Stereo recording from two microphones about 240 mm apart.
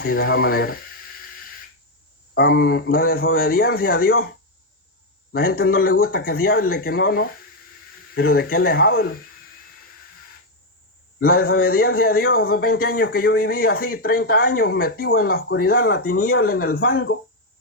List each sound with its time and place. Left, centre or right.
0.0 s a man's voice: left
2.3 s a man's voice: left
11.2 s a man's voice: left